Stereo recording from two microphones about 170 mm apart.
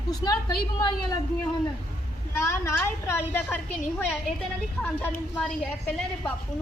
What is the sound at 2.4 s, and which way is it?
A woman's voice, 15° left (ahead or behind).